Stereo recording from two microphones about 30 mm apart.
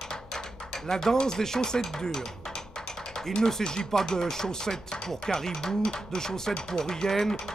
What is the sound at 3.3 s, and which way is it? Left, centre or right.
Speech, centre.